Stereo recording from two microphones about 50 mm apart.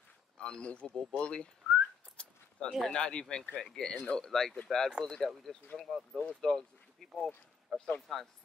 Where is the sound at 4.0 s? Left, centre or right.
Left.